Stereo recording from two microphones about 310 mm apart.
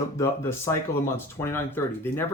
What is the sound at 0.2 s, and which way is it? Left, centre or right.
Speech, centre.